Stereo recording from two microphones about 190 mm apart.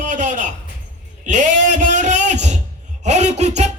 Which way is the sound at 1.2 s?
40° right (ahead or behind).